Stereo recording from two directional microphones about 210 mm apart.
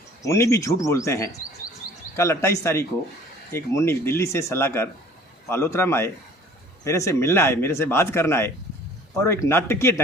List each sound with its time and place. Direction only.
0.2 s speech: 15° left (ahead or behind)